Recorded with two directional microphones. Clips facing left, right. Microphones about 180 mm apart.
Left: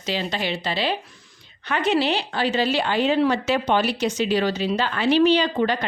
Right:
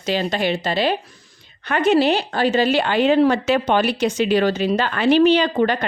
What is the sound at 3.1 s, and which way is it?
Speech, 50° right (ahead or behind).